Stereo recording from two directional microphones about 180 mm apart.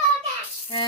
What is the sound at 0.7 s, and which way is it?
Speech, 30° left (ahead or behind).